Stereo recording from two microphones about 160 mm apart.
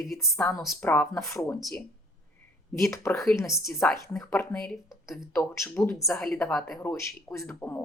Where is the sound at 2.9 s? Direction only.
15° left (ahead or behind).